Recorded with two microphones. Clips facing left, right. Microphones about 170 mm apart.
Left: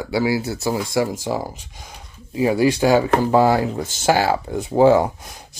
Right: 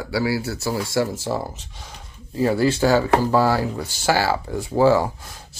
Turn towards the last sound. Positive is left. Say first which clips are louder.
# left 3 dB
turn(degrees=20)  # may be behind; listen again after turning